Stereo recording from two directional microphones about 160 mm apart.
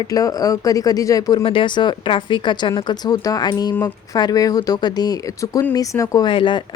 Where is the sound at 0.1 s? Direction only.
20° left (ahead or behind).